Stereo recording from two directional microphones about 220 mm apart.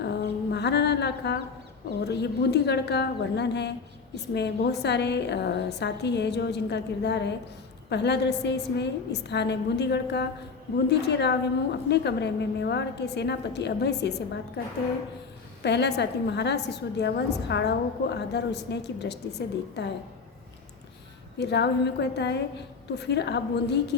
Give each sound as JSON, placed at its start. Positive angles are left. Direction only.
{"t": 0.0, "sound": "a sound", "side_deg": 50}
{"t": 2.0, "sound": "a woman's voice", "side_deg": 50}
{"t": 21.3, "sound": "a woman's voice", "side_deg": 50}